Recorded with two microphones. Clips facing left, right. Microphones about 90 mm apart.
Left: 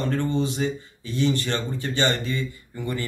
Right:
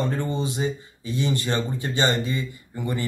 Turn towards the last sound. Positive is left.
turn(degrees=-15)  # may be behind; listen again after turning